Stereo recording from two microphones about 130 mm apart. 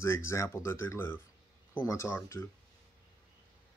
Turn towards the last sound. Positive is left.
turn(degrees=20)  # may be behind; listen again after turning